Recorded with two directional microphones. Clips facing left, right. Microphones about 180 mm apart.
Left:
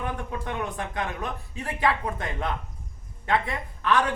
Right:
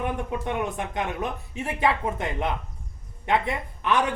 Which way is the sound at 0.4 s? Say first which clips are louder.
Right 2 dB; 20° right (ahead or behind).